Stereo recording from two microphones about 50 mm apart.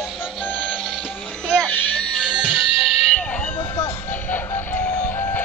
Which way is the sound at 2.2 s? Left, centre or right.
Centre.